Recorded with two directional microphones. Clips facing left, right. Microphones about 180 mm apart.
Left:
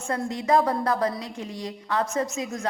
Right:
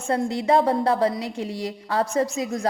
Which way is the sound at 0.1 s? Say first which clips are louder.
Right 3 dB; 30° right (ahead or behind).